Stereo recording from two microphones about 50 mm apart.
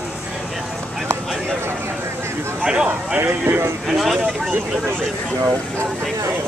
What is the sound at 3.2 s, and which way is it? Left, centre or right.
Speech, right.